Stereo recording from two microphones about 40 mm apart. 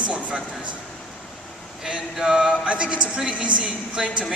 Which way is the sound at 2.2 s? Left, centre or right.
Centre.